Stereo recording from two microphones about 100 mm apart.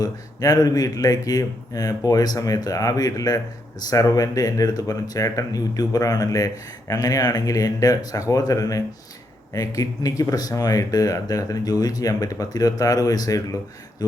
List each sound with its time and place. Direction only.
0.0 s speech: 40° left (ahead or behind)